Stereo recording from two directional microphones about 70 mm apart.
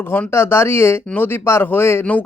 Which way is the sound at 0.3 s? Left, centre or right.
Left.